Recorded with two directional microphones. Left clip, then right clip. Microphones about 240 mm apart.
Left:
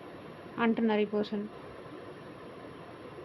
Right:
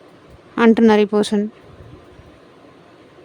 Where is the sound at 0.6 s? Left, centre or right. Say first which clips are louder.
Right 16 dB; right.